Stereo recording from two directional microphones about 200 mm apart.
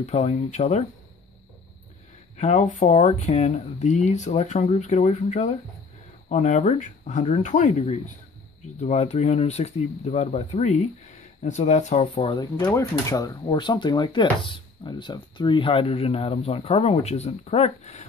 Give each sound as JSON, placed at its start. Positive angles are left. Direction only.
{"t": 0.0, "sound": "speech", "side_deg": 35}
{"t": 2.3, "sound": "speech", "side_deg": 35}
{"t": 12.5, "sound": "speech", "side_deg": 15}